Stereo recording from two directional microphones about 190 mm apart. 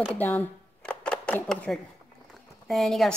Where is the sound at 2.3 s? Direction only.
Centre (ahead or behind).